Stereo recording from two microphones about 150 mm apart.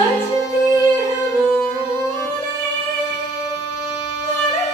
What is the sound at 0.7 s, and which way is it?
Music, 25° left (ahead or behind).